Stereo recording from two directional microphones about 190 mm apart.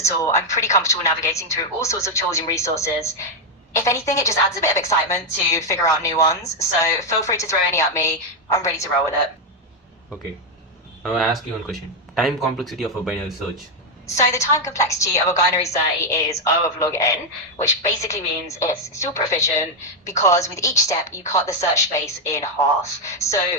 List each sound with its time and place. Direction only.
0.0 s a woman's voice: 15° left (ahead or behind)
11.0 s speech: centre (ahead or behind)
14.3 s a woman's voice: 15° left (ahead or behind)